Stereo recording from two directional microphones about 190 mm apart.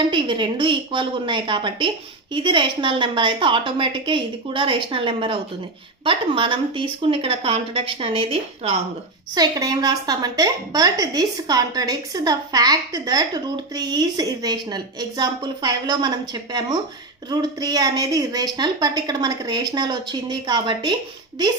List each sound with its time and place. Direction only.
0.1 s a woman's voice: 25° right (ahead or behind)
9.3 s a woman's voice: 20° right (ahead or behind)